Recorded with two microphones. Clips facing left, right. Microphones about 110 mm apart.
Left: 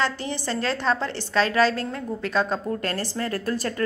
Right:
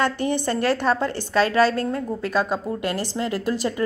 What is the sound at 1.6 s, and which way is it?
Speech, 45° right (ahead or behind).